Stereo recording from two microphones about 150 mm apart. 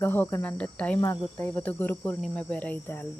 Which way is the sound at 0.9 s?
20° left (ahead or behind).